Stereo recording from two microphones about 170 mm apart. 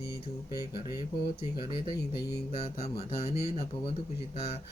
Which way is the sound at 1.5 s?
30° left (ahead or behind).